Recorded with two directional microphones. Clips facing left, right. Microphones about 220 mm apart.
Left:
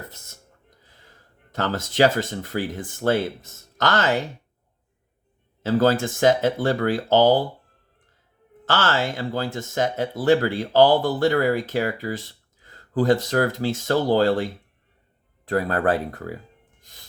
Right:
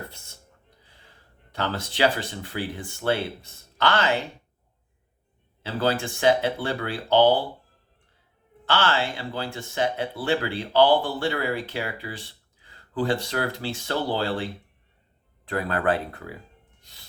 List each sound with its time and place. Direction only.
0.9 s speech: 45° left (ahead or behind)
5.6 s speech: 45° left (ahead or behind)
8.6 s speech: 45° left (ahead or behind)
15.4 s speech: 40° left (ahead or behind)